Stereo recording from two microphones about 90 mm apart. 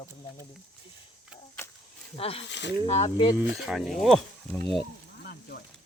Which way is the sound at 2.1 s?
90° left.